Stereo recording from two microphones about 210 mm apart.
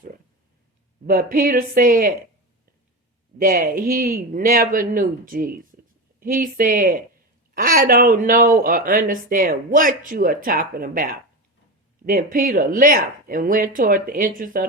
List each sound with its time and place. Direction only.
1.0 s speech: 45° right (ahead or behind)
3.3 s speech: 45° right (ahead or behind)